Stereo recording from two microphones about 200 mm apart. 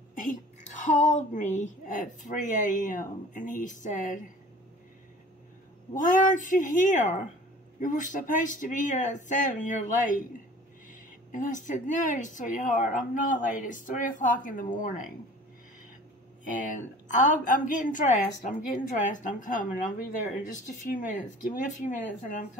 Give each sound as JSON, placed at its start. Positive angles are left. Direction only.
{"t": 0.2, "sound": "speech", "side_deg": 40}
{"t": 6.0, "sound": "speech", "side_deg": 40}
{"t": 17.2, "sound": "speech", "side_deg": 40}